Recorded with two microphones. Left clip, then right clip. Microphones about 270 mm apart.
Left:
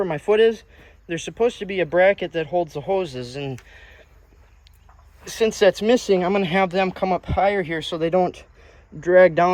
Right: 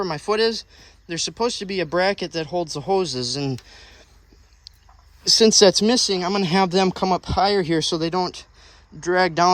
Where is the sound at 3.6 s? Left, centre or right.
Centre.